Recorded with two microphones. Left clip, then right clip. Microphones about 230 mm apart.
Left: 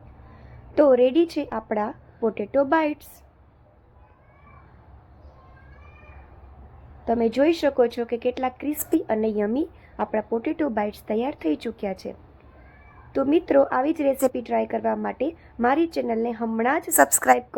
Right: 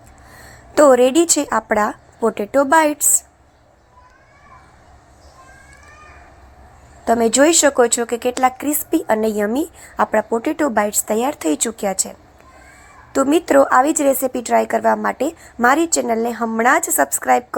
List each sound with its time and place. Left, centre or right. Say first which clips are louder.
0.7 s a woman's voice: right 6 dB; centre
7.0 s a woman's voice: right 7 dB; centre
13.1 s a woman's voice: right 6 dB; centre
16.9 s a woman's voice: even; centre